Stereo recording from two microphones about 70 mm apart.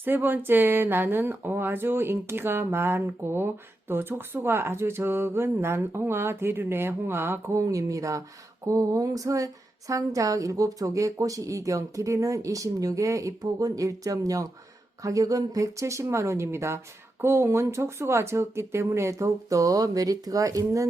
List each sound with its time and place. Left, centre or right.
0.0 s speech: right
7.5 s speech: right